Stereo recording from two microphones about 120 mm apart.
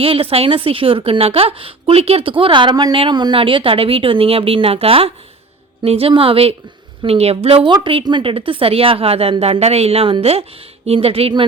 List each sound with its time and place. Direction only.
0.0 s a woman's voice: 50° right (ahead or behind)
7.7 s a woman's voice: 40° right (ahead or behind)